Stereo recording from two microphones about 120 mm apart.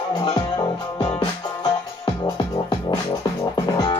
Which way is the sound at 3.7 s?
35° left (ahead or behind).